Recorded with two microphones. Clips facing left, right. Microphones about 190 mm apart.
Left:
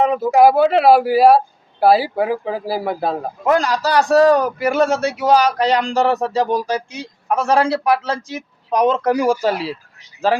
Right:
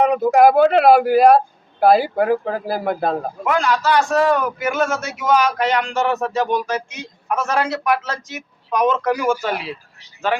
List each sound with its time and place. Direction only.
0.2 s a man's voice: 5° left (ahead or behind)
3.4 s a man's voice: 35° left (ahead or behind)